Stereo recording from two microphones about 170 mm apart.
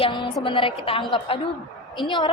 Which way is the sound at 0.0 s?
25° left (ahead or behind).